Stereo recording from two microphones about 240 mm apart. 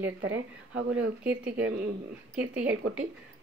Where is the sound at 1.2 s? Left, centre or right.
Centre.